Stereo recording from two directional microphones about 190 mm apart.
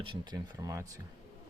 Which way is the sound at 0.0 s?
25° right (ahead or behind).